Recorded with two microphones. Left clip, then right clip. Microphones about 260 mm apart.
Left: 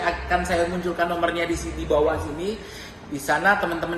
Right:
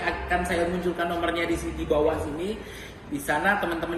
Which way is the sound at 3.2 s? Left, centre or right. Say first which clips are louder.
Left 4 dB; left.